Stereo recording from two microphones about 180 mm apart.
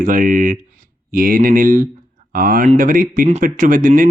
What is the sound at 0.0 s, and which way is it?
Speech, 50° right (ahead or behind).